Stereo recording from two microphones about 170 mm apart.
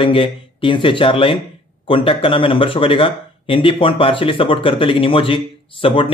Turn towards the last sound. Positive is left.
turn(degrees=30)  # may be behind; listen again after turning